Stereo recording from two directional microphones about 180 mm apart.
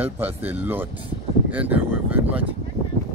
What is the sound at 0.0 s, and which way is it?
Speech, 10° right (ahead or behind).